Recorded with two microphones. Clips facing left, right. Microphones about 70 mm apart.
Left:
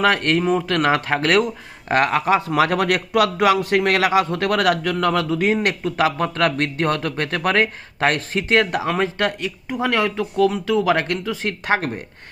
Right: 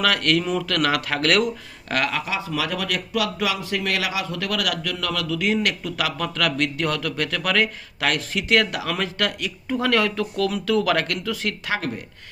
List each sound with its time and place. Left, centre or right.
0.0 s speech: left